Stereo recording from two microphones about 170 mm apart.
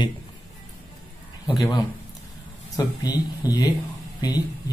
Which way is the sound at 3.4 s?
20° left (ahead or behind).